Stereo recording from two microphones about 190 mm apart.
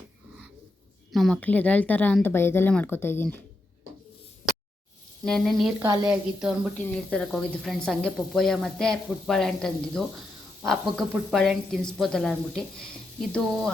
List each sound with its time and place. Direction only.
1.1 s speech: centre (ahead or behind)
4.4 s a sound: centre (ahead or behind)
5.2 s speech: centre (ahead or behind)
5.8 s a woman's voice: 20° right (ahead or behind)
6.1 s speech: 5° right (ahead or behind)